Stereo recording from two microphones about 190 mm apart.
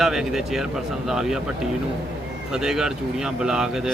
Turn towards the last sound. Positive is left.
turn(degrees=-5)  # may be behind; listen again after turning